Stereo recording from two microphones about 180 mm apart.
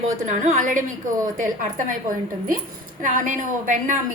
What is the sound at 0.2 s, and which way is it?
A woman's voice, 45° right (ahead or behind).